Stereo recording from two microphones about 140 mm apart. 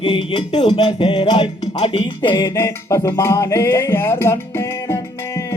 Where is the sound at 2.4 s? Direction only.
20° left (ahead or behind).